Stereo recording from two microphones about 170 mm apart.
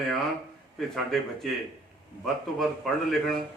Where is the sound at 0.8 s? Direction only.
Centre (ahead or behind).